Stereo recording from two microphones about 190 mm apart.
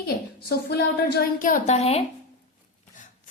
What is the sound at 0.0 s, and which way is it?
A woman's voice, 55° left (ahead or behind).